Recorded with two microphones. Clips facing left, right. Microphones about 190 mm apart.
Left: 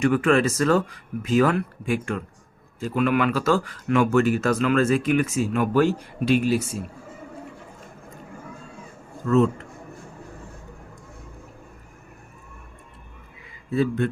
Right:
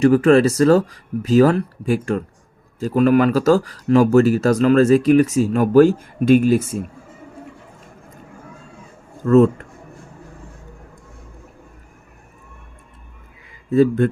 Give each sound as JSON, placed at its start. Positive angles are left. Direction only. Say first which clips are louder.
{"t": 0.0, "sound": "speech", "louder": "right 7 dB", "side_deg": -40}
{"t": 9.2, "sound": "speech", "louder": "right 7 dB", "side_deg": -45}
{"t": 13.7, "sound": "speech", "louder": "right 8 dB", "side_deg": -45}